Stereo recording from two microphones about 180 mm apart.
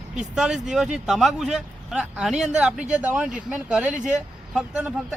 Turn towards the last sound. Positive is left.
turn(degrees=-5)  # may be behind; listen again after turning